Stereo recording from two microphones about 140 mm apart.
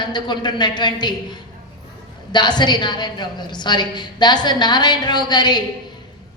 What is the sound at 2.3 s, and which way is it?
A woman's voice, 30° left (ahead or behind).